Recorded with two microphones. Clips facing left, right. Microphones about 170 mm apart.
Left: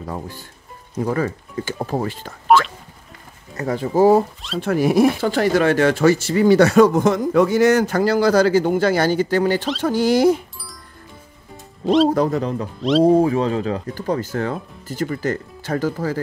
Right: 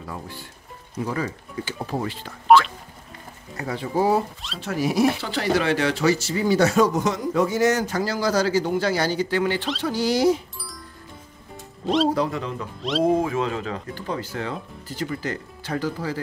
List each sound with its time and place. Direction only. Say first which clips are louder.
0.0 s speech: left 5 dB; 40° left (ahead or behind)
2.4 s a sound: even; centre (ahead or behind)
3.5 s speech: left 6 dB; 45° left (ahead or behind)
4.6 s speech: left 6 dB; 55° left (ahead or behind)
12.1 s speech: left 5 dB; 45° left (ahead or behind)